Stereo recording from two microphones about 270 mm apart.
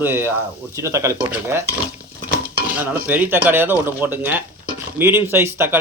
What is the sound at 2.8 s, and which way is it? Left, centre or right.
A man's voice, centre.